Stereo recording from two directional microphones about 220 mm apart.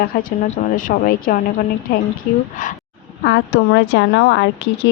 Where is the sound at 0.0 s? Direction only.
40° left (ahead or behind).